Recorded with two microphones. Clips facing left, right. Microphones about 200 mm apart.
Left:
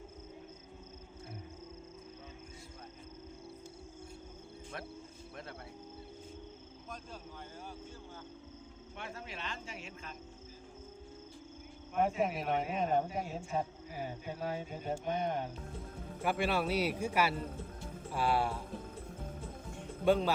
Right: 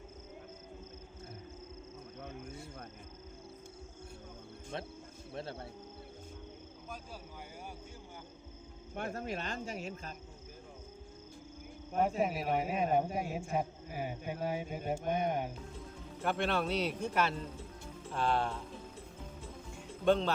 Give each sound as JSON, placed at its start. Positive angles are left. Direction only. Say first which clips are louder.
{"t": 5.3, "sound": "speech", "louder": "right 7 dB", "side_deg": -30}
{"t": 9.0, "sound": "speech", "louder": "right 7 dB", "side_deg": -45}
{"t": 12.2, "sound": "speech", "louder": "right 1 dB", "side_deg": -5}
{"t": 16.2, "sound": "speech", "louder": "even", "side_deg": 5}
{"t": 19.4, "sound": "music", "louder": "left 2 dB", "side_deg": 55}
{"t": 20.1, "sound": "speech", "louder": "even", "side_deg": 5}